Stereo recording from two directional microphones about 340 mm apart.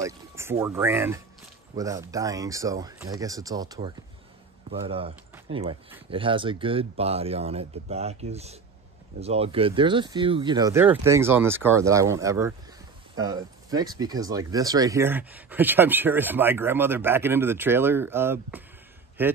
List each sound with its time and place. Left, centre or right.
0.0 s a man's voice: centre